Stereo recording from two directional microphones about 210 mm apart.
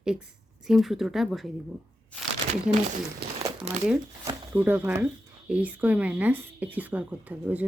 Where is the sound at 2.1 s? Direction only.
5° left (ahead or behind).